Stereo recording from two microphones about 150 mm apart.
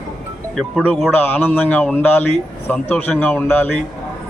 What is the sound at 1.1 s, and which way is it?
A man's voice, 10° left (ahead or behind).